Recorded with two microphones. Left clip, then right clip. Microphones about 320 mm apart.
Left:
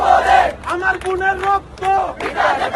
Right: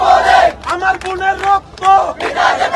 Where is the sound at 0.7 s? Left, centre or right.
Right.